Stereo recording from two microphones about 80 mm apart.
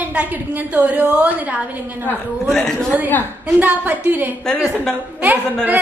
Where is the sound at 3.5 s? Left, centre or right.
Right.